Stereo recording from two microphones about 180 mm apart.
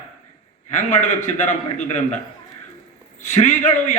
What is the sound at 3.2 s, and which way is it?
Speech, 40° left (ahead or behind).